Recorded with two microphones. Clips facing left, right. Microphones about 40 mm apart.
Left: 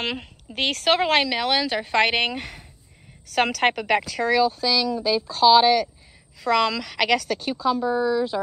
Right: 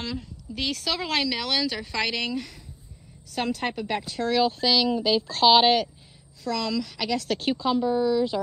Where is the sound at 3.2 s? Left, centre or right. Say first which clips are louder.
Left 7 dB; left.